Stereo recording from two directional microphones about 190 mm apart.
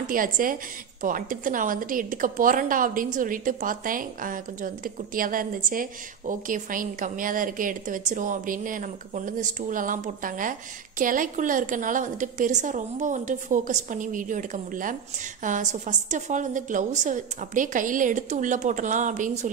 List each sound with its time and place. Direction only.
0.0 s a woman's voice: 45° right (ahead or behind)